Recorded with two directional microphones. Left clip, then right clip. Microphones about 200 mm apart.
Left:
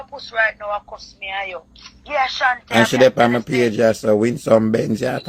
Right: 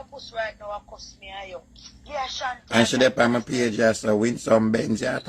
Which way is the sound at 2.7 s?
35° left (ahead or behind).